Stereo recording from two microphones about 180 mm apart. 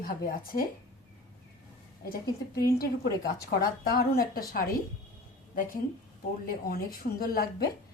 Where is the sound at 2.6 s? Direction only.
55° left (ahead or behind).